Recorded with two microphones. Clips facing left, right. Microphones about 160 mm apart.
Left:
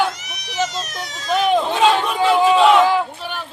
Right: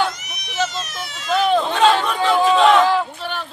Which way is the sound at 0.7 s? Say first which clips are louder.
Left 1 dB; 40° left (ahead or behind).